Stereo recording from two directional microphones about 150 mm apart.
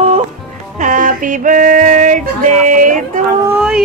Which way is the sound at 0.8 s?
60° right (ahead or behind).